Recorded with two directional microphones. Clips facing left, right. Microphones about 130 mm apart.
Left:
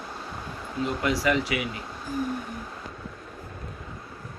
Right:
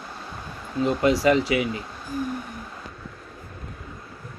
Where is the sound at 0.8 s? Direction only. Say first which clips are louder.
Right 6 dB; 25° right (ahead or behind).